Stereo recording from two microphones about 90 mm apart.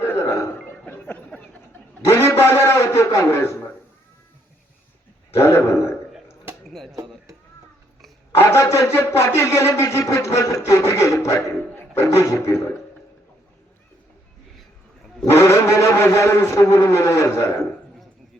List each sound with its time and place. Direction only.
0.0 s chuckle: 25° left (ahead or behind)
0.9 s music: 20° left (ahead or behind)
2.0 s a man's voice: 30° left (ahead or behind)
5.4 s speech: 30° left (ahead or behind)
6.7 s music: 5° left (ahead or behind)
8.4 s speech: 30° left (ahead or behind)
15.3 s a man's voice: 30° left (ahead or behind)